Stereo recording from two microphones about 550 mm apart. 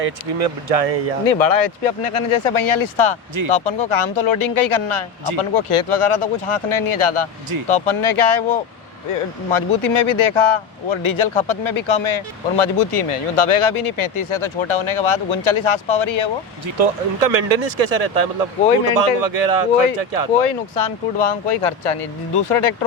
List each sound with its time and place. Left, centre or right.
0.0 s speech: right
1.2 s speech: left
9.5 s speech: left
16.7 s speech: right
20.4 s speech: left